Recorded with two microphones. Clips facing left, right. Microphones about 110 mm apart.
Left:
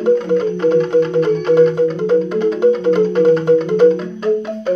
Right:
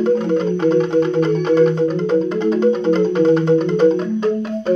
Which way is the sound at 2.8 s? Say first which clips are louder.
Left 2 dB; 15° left (ahead or behind).